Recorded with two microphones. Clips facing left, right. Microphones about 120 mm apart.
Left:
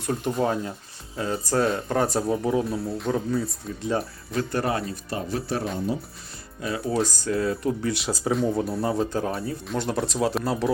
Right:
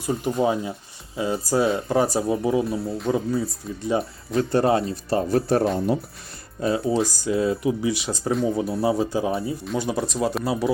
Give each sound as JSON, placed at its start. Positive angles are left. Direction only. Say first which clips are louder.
{"t": 0.0, "sound": "speech", "louder": "right 2 dB", "side_deg": -5}
{"t": 4.4, "sound": "speech", "louder": "right 6 dB", "side_deg": -25}
{"t": 6.6, "sound": "speech", "louder": "right 7 dB", "side_deg": -30}
{"t": 7.0, "sound": "speech", "louder": "right 2 dB", "side_deg": -10}
{"t": 7.6, "sound": "speech", "louder": "right 3 dB", "side_deg": -10}